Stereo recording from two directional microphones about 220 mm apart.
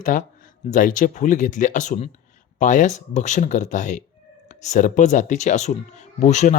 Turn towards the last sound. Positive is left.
turn(degrees=30)  # may be behind; listen again after turning